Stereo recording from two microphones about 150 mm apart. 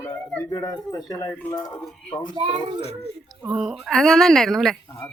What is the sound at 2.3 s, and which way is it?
Speech, 30° right (ahead or behind).